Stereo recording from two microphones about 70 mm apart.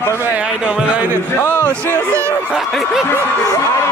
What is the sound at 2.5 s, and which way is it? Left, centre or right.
Snicker, centre.